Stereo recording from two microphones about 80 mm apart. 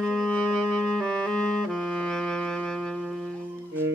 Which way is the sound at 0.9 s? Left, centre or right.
Centre.